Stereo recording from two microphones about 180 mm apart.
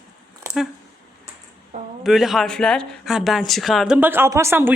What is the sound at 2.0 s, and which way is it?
Speech, centre (ahead or behind).